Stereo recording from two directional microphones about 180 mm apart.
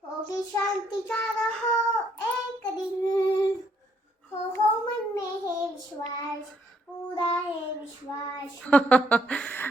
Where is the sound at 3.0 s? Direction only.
25° left (ahead or behind).